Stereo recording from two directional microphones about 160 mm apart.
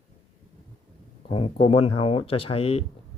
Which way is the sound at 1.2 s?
35° left (ahead or behind).